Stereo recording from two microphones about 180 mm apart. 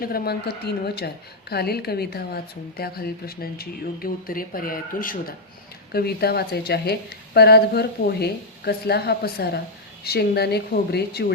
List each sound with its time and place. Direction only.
0.0 s a woman's voice: 60° left (ahead or behind)